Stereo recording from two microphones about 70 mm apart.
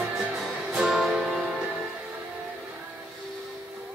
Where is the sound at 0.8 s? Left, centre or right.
Centre.